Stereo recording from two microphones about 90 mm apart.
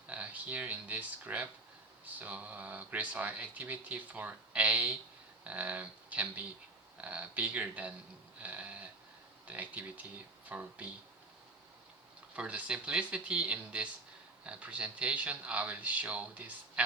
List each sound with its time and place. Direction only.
0.1 s speech: 15° right (ahead or behind)
8.4 s sheep: 15° right (ahead or behind)
9.5 s speech: 15° right (ahead or behind)
12.4 s speech: 15° right (ahead or behind)